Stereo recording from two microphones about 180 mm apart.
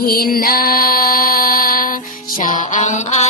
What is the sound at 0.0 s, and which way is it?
Music, 55° left (ahead or behind).